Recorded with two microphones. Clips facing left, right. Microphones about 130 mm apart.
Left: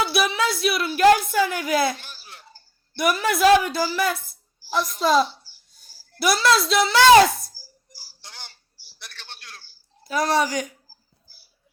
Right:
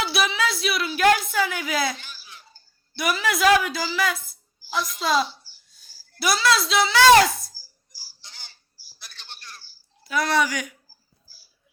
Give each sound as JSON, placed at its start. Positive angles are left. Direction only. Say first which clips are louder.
{"t": 0.2, "sound": "speech", "louder": "even", "side_deg": 50}
{"t": 3.0, "sound": "a woman's voice", "louder": "left 3 dB", "side_deg": 50}
{"t": 5.5, "sound": "a sound", "louder": "left 2 dB", "side_deg": 55}
{"t": 10.0, "sound": "speech", "louder": "left 1 dB", "side_deg": 40}